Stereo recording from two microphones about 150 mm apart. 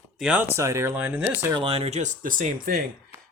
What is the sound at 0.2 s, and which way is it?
Speech, 5° right (ahead or behind).